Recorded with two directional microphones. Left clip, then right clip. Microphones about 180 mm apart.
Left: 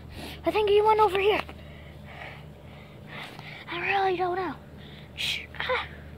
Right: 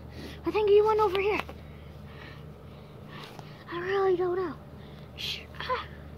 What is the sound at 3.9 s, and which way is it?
Speech, 60° left (ahead or behind).